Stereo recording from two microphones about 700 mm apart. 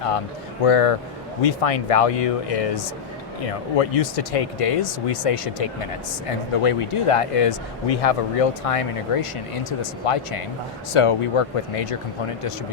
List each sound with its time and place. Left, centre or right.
0.6 s speech: left